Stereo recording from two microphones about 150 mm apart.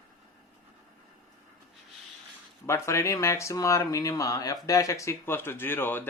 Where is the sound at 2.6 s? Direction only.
15° left (ahead or behind).